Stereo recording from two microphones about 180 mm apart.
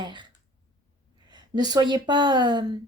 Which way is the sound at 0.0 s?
25° right (ahead or behind).